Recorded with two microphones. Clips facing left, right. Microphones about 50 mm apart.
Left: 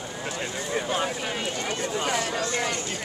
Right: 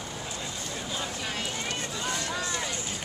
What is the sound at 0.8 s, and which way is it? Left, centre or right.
Vehicle, left.